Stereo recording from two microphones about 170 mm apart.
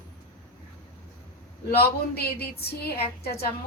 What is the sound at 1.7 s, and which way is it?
A woman's voice, 65° left (ahead or behind).